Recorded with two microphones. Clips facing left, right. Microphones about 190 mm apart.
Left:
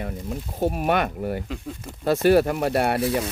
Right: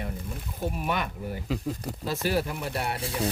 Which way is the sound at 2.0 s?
60° left (ahead or behind).